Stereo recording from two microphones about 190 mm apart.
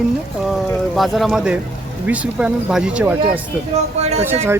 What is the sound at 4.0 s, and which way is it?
Speech, 35° right (ahead or behind).